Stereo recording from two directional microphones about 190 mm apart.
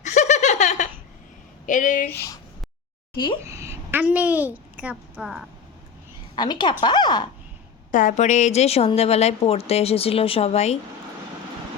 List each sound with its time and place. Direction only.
0.0 s laughter: 40° left (ahead or behind)
1.6 s speech: 40° left (ahead or behind)
2.0 s speech: 15° left (ahead or behind)
3.4 s a woman's voice: 15° right (ahead or behind)
6.3 s a woman's voice: 25° left (ahead or behind)
7.9 s a woman's voice: 40° left (ahead or behind)